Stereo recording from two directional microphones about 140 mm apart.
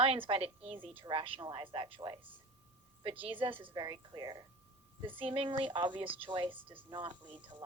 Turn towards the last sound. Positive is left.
turn(degrees=-35)  # may be behind; listen again after turning